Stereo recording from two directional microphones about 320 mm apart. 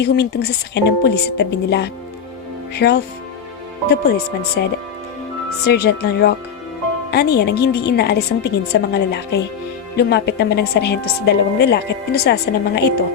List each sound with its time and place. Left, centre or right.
0.0 s a woman's voice: left
4.6 s a woman's voice: left